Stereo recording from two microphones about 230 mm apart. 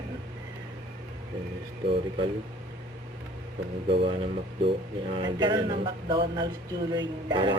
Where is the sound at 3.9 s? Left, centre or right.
Right.